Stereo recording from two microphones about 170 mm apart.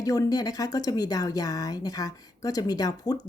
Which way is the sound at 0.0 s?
20° left (ahead or behind).